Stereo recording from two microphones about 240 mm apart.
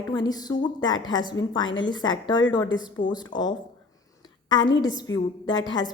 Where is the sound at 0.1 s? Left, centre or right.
Centre.